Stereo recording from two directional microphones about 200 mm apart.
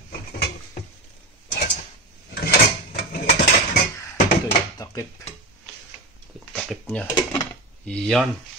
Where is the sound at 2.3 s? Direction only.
50° left (ahead or behind).